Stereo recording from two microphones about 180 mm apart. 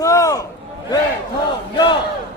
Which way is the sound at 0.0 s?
20° left (ahead or behind).